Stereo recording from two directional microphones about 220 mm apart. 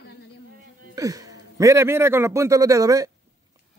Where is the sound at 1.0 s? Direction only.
15° right (ahead or behind).